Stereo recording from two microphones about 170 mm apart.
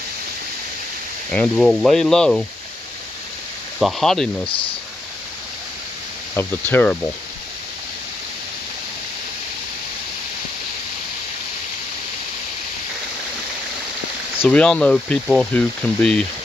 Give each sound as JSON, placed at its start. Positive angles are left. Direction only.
{"t": 1.3, "sound": "speech", "side_deg": 5}
{"t": 3.8, "sound": "speech", "side_deg": 0}
{"t": 4.5, "sound": "speech", "side_deg": 30}
{"t": 6.3, "sound": "speech", "side_deg": 10}
{"t": 14.4, "sound": "speech", "side_deg": 5}